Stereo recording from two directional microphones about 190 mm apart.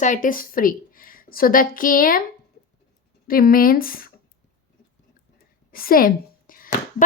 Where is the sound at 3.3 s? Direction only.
50° left (ahead or behind).